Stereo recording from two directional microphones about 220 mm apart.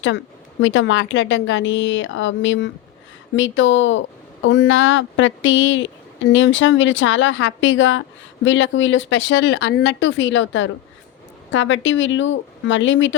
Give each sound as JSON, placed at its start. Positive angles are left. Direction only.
{"t": 0.6, "sound": "speech", "side_deg": 60}